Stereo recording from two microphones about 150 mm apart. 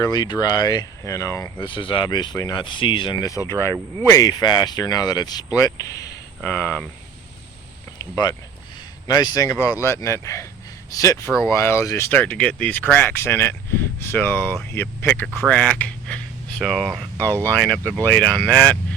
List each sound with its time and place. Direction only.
0.0 s speech: 25° left (ahead or behind)
1.5 s speech: 35° left (ahead or behind)
3.2 s speech: 20° left (ahead or behind)
7.9 s speech: 25° left (ahead or behind); by 16.6 s 10° left (ahead or behind)
16.6 s speech: centre (ahead or behind)
17.5 s speech: 10° left (ahead or behind)